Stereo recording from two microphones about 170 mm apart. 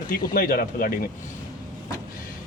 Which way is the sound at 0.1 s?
55° left (ahead or behind).